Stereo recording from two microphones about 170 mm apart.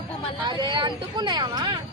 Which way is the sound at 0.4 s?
25° right (ahead or behind).